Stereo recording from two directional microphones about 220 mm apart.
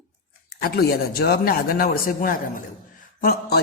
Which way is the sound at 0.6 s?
45° left (ahead or behind).